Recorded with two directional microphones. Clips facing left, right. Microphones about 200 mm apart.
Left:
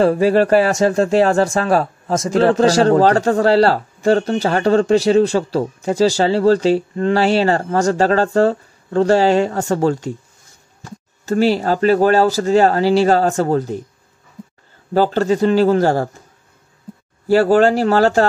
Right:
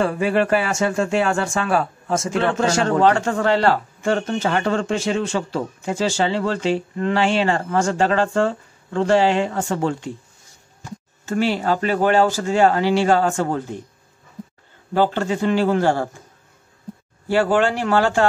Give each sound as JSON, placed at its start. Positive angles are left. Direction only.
{"t": 0.0, "sound": "speech", "side_deg": 35}
{"t": 11.2, "sound": "speech", "side_deg": 40}
{"t": 15.0, "sound": "speech", "side_deg": 40}
{"t": 17.3, "sound": "speech", "side_deg": 40}